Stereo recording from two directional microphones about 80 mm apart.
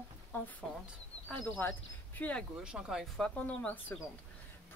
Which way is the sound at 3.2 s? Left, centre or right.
Centre.